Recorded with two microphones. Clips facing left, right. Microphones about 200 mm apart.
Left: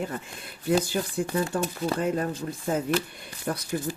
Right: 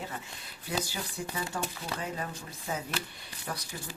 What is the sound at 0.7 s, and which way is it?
Speech, 55° left (ahead or behind).